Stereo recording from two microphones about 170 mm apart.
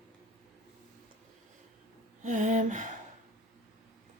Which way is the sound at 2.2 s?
45° right (ahead or behind).